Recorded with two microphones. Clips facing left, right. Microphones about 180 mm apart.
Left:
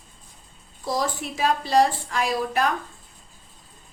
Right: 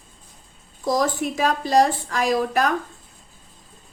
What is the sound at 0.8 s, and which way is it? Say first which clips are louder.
Speech: right 5 dB; 45° right (ahead or behind).